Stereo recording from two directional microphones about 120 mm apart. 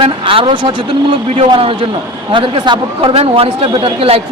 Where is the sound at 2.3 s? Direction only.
40° right (ahead or behind).